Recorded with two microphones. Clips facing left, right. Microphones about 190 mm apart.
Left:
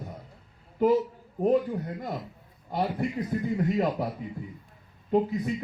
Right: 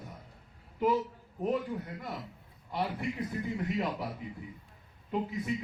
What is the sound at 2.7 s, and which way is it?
Speech, 40° left (ahead or behind).